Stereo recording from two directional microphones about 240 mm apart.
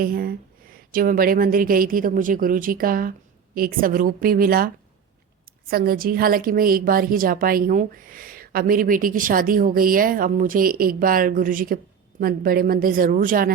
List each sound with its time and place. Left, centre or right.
0.0 s a woman's voice: right
5.7 s a woman's voice: right